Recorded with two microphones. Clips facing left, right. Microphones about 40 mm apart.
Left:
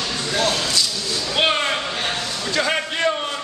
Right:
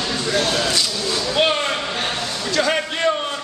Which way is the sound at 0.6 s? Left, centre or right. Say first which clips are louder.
Right 2 dB; centre.